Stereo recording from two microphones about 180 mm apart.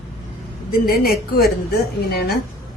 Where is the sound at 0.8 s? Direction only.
55° left (ahead or behind).